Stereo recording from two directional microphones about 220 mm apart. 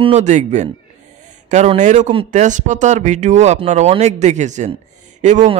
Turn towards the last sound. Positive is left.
turn(degrees=-30)  # may be behind; listen again after turning